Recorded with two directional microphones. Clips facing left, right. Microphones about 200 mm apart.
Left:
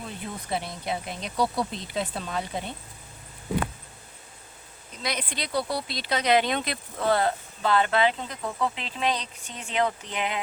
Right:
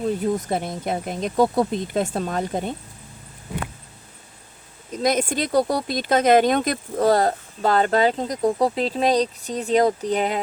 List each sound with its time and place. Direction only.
0.2 s speech: 45° right (ahead or behind)
5.0 s speech: 45° right (ahead or behind)